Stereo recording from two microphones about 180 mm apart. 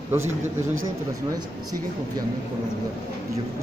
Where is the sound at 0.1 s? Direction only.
15° right (ahead or behind).